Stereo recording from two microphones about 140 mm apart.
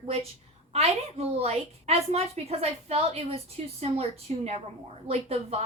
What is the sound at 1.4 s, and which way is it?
A woman's voice, 45° right (ahead or behind).